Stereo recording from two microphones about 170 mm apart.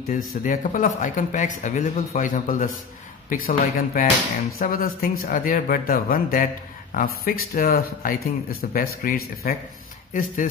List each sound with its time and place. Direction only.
0.3 s speech: 50° left (ahead or behind)